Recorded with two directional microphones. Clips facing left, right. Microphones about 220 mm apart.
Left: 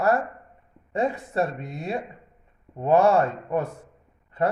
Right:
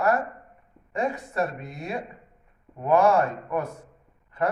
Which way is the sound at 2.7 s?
30° left (ahead or behind).